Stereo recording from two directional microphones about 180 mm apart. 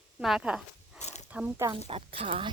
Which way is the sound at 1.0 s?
40° left (ahead or behind).